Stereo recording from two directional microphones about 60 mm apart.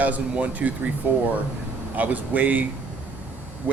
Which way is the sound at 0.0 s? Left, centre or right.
Right.